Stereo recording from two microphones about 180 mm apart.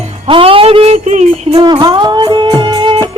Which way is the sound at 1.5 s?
30° right (ahead or behind).